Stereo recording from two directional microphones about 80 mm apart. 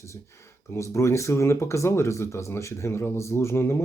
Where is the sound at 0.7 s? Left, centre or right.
Left.